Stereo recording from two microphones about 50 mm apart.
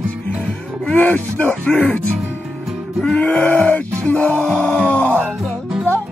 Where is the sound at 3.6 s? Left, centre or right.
Left.